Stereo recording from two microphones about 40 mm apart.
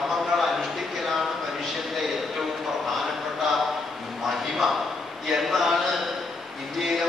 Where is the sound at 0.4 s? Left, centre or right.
Centre.